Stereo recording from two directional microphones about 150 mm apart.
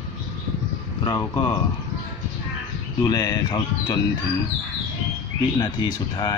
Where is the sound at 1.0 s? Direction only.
30° left (ahead or behind).